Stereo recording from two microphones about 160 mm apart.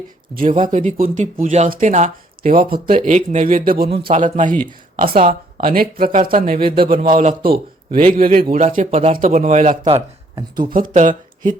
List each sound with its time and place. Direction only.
0.5 s speech: 50° right (ahead or behind)
4.0 s speech: 45° right (ahead or behind)
4.9 s speech: 65° right (ahead or behind)
5.2 s speech: 55° right (ahead or behind)
7.9 s speech: 35° right (ahead or behind)
8.1 s speech: 60° right (ahead or behind)
8.5 s speech: 50° right (ahead or behind)
9.1 s speech: 55° right (ahead or behind)
9.8 s speech: 30° right (ahead or behind)
10.7 s speech: 55° right (ahead or behind)